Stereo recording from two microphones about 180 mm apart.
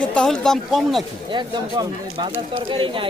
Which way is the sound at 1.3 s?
25° right (ahead or behind).